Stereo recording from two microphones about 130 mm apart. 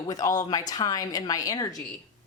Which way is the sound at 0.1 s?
30° left (ahead or behind).